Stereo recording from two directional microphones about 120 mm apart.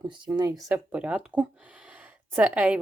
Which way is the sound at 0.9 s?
10° right (ahead or behind).